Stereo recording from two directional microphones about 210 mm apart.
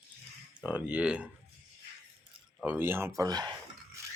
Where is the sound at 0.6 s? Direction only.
5° right (ahead or behind).